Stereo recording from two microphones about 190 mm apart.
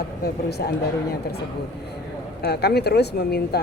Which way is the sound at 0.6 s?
55° left (ahead or behind).